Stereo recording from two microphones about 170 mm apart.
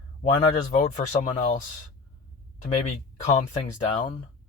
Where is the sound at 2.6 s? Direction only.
40° left (ahead or behind).